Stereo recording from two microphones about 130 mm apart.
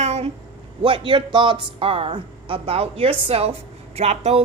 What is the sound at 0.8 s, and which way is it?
A man's voice, 45° right (ahead or behind).